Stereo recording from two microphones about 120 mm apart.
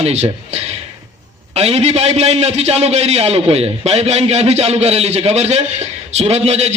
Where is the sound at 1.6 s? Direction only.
60° right (ahead or behind).